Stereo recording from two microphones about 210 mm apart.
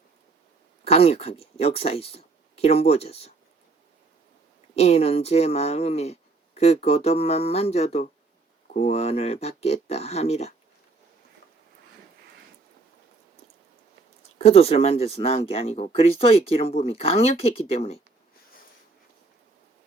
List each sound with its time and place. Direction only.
0.9 s speech: 30° left (ahead or behind)
4.7 s speech: 30° left (ahead or behind)
14.3 s speech: 30° left (ahead or behind)